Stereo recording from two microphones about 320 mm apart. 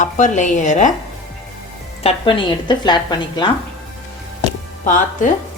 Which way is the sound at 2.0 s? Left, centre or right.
Centre.